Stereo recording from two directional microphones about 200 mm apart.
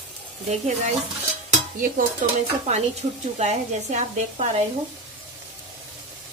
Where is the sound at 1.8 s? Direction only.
40° right (ahead or behind).